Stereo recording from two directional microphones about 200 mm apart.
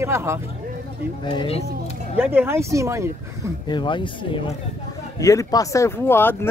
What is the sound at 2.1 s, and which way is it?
Speech, 10° right (ahead or behind).